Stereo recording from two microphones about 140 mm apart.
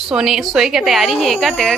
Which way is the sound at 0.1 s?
5° right (ahead or behind).